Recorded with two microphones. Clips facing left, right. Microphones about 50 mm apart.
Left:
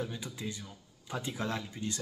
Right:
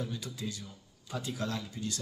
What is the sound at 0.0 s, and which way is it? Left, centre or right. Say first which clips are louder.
Speech: even; left.